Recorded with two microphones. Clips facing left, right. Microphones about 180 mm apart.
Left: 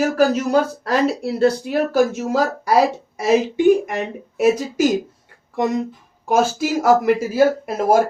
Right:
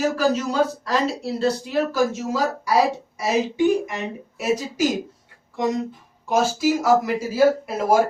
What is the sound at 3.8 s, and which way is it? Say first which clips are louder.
Speech: left 4 dB; 55° left (ahead or behind).